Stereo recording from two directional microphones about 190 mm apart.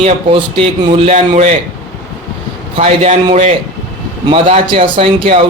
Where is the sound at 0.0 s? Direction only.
30° right (ahead or behind).